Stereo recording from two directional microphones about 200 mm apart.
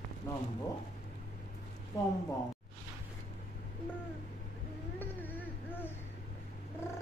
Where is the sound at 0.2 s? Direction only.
15° left (ahead or behind).